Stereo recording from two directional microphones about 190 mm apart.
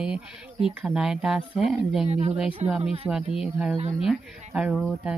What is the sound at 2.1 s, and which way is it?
Speech, 35° right (ahead or behind).